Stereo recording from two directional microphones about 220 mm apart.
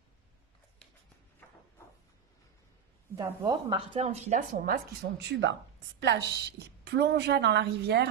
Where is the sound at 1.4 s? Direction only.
5° left (ahead or behind).